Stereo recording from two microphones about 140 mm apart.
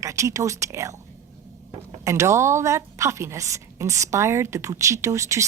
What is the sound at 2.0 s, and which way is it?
Speech, 20° right (ahead or behind).